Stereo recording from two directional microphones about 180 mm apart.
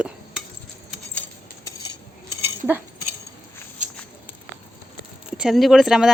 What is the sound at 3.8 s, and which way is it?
Walk, 40° right (ahead or behind).